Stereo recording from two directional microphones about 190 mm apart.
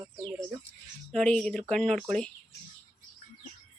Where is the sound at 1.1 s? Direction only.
5° left (ahead or behind).